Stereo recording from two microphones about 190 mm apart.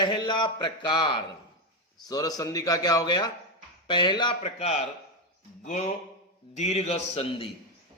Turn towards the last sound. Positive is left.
turn(degrees=30)  # may be behind; listen again after turning